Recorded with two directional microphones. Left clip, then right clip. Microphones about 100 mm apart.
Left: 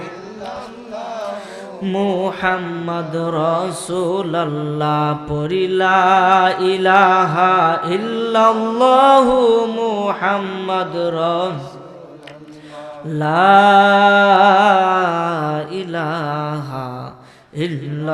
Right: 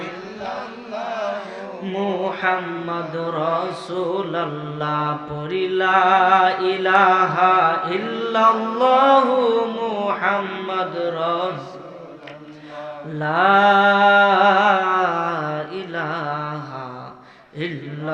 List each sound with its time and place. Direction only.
0.4 s chant: 25° left (ahead or behind)
1.8 s mantra: 55° left (ahead or behind)
13.1 s music: 55° left (ahead or behind)
17.6 s mantra: 50° left (ahead or behind)